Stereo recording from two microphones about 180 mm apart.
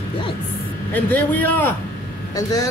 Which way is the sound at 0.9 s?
10° left (ahead or behind).